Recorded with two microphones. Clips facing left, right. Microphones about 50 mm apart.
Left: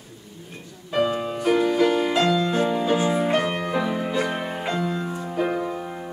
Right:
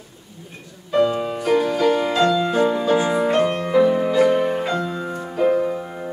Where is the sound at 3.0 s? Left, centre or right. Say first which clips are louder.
Right 3 dB; right.